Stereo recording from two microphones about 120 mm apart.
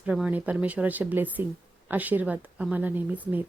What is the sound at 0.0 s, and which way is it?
A woman's voice, 10° right (ahead or behind).